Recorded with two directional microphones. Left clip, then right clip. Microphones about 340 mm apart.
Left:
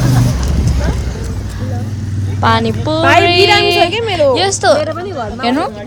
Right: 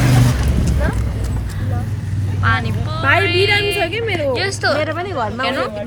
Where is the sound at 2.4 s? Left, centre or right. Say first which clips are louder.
Left 7 dB; centre.